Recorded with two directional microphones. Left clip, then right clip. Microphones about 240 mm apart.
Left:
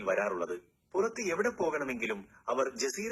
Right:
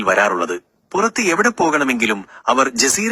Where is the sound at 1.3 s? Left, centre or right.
Right.